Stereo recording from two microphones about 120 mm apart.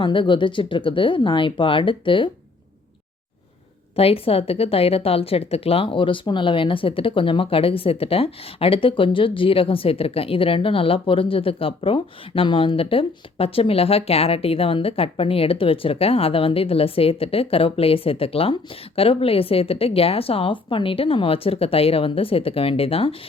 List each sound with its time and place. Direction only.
0.0 s speech: 45° left (ahead or behind)
3.9 s speech: 55° left (ahead or behind)